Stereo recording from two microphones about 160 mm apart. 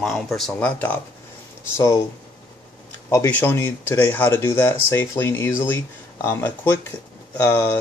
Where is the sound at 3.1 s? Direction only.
15° left (ahead or behind).